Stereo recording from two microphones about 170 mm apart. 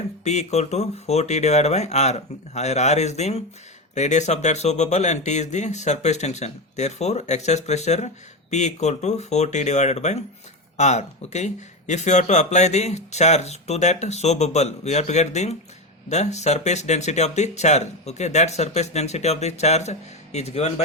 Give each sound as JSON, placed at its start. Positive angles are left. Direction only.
{"t": 0.3, "sound": "speech", "side_deg": 40}